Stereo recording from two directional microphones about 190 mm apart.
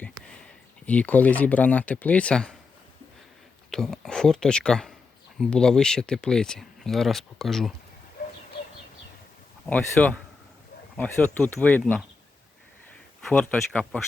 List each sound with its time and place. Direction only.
0.2 s a sound: 20° right (ahead or behind)
0.9 s speech: 10° left (ahead or behind)
3.7 s speech: 5° left (ahead or behind)
9.6 s speech: 10° left (ahead or behind)
13.2 s speech: 5° left (ahead or behind)